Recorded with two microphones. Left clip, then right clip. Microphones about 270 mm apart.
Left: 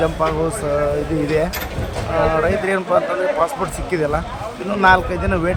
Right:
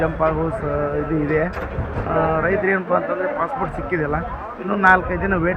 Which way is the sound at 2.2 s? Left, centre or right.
Centre.